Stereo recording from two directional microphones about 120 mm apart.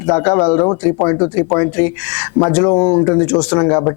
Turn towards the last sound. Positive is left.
turn(degrees=25)  # may be behind; listen again after turning